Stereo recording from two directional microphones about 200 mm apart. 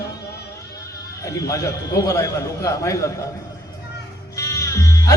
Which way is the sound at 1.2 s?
15° left (ahead or behind).